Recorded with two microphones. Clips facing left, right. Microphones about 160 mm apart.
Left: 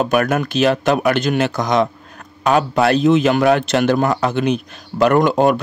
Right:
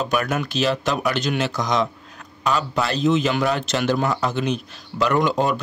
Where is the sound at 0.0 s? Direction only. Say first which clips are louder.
Left 6 dB; 55° left (ahead or behind).